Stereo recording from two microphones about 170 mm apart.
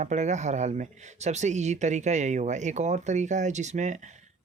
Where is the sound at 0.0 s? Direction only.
45° right (ahead or behind).